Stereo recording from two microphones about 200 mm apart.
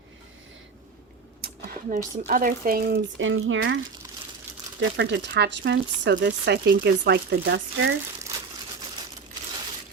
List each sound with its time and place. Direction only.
1.4 s a sound: 45° right (ahead or behind)
2.1 s speech: 40° right (ahead or behind)
3.2 s speech: 75° right (ahead or behind)
4.8 s speech: 65° right (ahead or behind)